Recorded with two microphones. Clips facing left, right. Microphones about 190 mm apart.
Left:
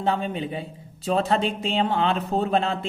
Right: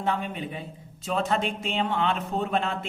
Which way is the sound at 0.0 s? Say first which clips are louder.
Left 4 dB; 30° left (ahead or behind).